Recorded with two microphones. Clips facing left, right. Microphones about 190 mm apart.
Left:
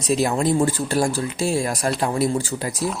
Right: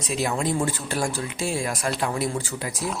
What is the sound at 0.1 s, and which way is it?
Speech, 40° left (ahead or behind).